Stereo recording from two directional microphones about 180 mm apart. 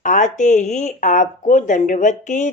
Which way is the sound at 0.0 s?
45° left (ahead or behind).